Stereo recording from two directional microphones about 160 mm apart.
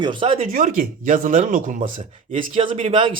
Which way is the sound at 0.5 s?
60° right (ahead or behind).